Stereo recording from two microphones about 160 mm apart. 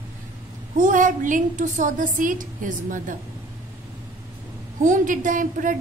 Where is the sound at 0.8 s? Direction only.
55° right (ahead or behind).